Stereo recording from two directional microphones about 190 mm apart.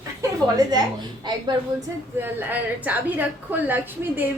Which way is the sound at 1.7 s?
10° right (ahead or behind).